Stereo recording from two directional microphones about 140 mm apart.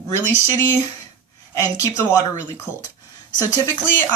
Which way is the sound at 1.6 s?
20° left (ahead or behind).